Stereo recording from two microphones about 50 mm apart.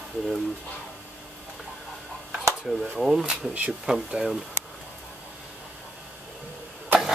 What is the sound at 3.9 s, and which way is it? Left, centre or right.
Speech, right.